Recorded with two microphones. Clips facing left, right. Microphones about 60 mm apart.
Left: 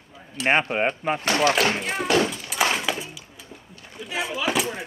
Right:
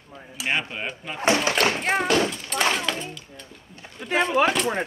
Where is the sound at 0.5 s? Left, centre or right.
Left.